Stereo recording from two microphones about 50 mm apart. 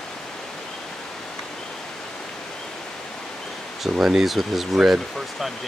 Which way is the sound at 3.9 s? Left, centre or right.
Centre.